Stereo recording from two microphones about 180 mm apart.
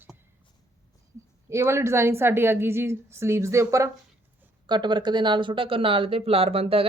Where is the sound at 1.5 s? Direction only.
15° right (ahead or behind).